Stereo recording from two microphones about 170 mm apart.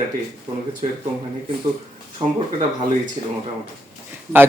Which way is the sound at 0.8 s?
40° right (ahead or behind).